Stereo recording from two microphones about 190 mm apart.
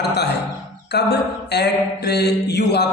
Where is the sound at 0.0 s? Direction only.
60° left (ahead or behind).